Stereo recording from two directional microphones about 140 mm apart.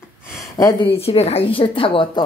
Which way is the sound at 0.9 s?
45° left (ahead or behind).